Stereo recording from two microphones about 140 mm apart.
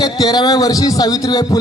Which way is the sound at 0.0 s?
30° left (ahead or behind).